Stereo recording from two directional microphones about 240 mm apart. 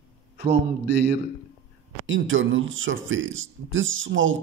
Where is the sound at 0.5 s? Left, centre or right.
Right.